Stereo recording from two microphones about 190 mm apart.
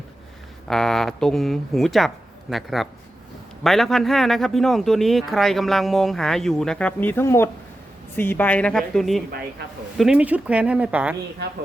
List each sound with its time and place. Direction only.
0.7 s a woman's voice: centre (ahead or behind)